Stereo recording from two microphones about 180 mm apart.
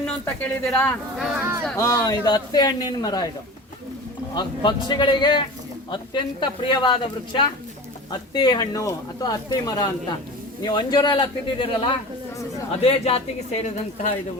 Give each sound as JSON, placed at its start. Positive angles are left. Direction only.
{"t": 0.0, "sound": "speech", "side_deg": 5}
{"t": 1.2, "sound": "speech", "side_deg": -15}
{"t": 1.7, "sound": "speech", "side_deg": 20}
{"t": 4.4, "sound": "a woman's voice", "side_deg": 25}